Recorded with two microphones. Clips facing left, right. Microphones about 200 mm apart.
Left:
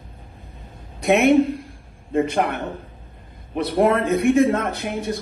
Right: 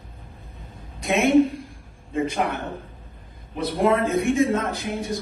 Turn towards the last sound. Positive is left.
turn(degrees=65)  # may be behind; listen again after turning